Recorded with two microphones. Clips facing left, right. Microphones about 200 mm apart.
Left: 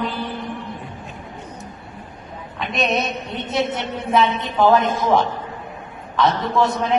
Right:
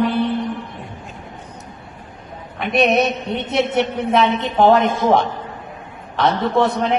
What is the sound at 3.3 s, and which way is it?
A woman's voice, 70° right (ahead or behind).